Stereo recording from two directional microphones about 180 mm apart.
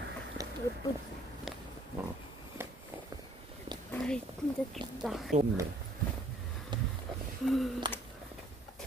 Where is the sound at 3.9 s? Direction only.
5° left (ahead or behind).